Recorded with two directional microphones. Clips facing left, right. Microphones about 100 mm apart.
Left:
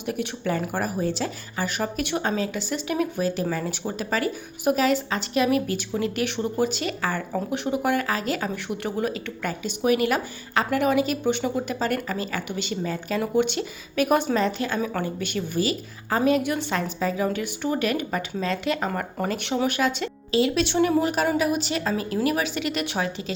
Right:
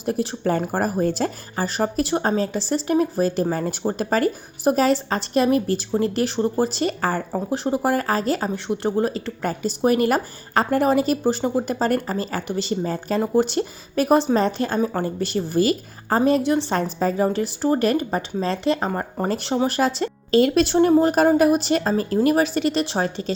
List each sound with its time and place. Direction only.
0.0 s a woman's voice: 35° right (ahead or behind)